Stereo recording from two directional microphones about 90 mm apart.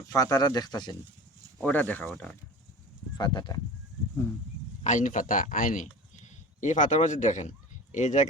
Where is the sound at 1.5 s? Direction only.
15° left (ahead or behind).